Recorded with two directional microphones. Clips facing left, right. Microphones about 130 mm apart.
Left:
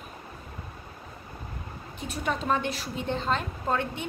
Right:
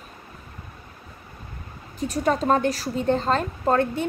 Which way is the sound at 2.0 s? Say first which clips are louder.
Right 8 dB; 40° right (ahead or behind).